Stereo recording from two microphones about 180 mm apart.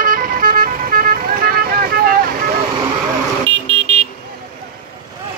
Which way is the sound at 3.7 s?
30° right (ahead or behind).